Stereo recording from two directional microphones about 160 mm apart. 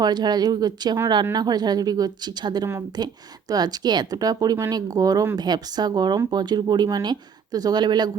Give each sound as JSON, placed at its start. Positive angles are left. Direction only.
{"t": 0.0, "sound": "speech", "side_deg": -25}